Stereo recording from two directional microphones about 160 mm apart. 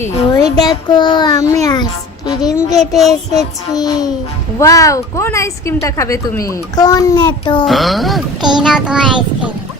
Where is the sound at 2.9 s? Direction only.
Centre (ahead or behind).